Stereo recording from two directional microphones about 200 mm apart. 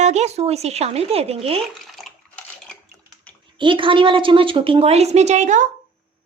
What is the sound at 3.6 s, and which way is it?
A woman's voice, 25° right (ahead or behind).